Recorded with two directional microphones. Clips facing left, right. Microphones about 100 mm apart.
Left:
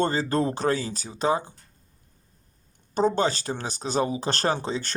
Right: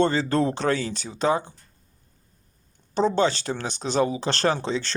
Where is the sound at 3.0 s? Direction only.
45° left (ahead or behind).